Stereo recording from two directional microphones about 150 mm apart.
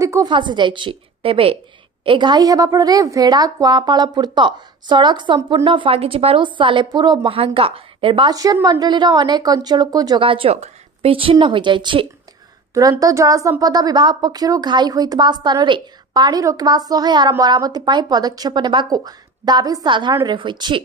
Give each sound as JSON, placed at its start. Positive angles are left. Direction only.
{"t": 0.0, "sound": "a woman's voice", "side_deg": -20}
{"t": 0.3, "sound": "a woman's voice", "side_deg": -30}
{"t": 13.0, "sound": "a woman's voice", "side_deg": -20}